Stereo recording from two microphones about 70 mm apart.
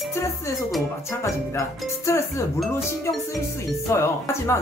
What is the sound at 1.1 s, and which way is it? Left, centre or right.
Speech, left.